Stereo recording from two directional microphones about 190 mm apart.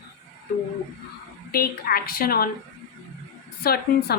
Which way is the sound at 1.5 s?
50° left (ahead or behind).